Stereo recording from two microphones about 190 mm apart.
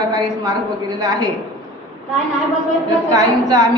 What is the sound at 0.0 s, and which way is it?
A woman's voice, 20° right (ahead or behind).